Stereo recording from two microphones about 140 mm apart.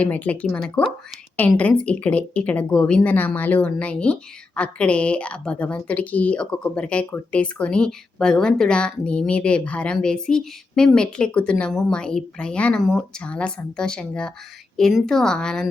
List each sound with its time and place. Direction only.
0.0 s a woman's voice: 10° left (ahead or behind)